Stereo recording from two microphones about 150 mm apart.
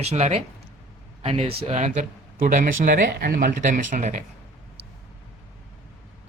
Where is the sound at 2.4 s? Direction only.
60° right (ahead or behind).